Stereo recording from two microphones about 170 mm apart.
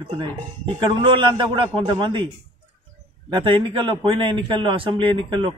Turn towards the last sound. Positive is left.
turn(degrees=-30)  # may be behind; listen again after turning